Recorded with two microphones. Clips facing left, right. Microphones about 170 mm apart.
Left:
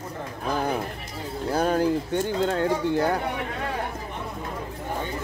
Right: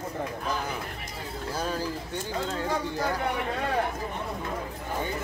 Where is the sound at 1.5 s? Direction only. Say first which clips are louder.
Left 9 dB; 60° left (ahead or behind).